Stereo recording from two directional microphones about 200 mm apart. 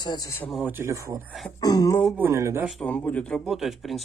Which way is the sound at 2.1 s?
10° right (ahead or behind).